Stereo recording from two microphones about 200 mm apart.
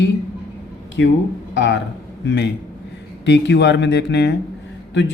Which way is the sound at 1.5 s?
65° left (ahead or behind).